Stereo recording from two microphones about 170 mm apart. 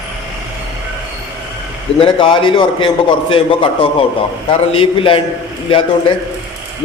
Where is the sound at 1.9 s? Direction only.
30° left (ahead or behind).